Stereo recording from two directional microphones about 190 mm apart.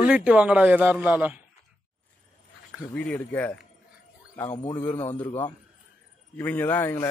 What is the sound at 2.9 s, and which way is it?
A man's voice, 10° left (ahead or behind).